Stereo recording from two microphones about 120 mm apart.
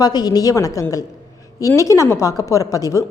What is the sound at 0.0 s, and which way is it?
A woman's voice, 35° left (ahead or behind).